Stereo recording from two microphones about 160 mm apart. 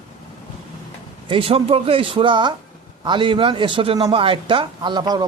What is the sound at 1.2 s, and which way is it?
Speech, 35° right (ahead or behind).